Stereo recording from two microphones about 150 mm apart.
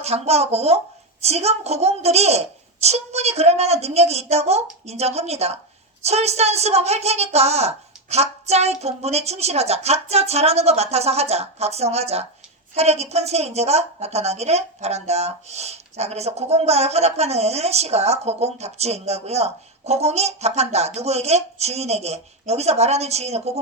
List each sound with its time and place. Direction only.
0.0 s a woman's voice: 45° right (ahead or behind)